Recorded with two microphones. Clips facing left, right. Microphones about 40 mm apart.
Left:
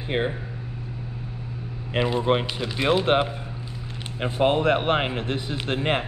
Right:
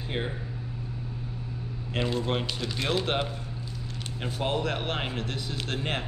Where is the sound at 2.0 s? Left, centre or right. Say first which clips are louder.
Left 7 dB; left.